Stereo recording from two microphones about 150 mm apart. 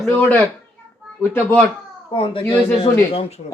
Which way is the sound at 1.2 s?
15° left (ahead or behind).